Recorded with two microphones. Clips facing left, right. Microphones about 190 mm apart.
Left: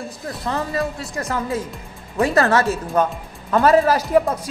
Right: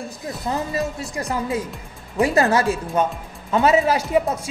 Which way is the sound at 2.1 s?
15° right (ahead or behind).